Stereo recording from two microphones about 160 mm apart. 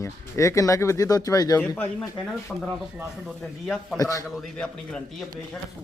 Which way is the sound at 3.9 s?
20° left (ahead or behind).